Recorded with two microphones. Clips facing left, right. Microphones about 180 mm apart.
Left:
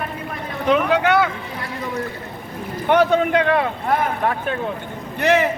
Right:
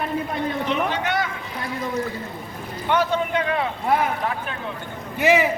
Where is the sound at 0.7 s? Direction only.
80° left.